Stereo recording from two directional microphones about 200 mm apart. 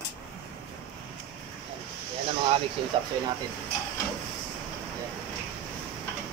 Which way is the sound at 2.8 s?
25° right (ahead or behind).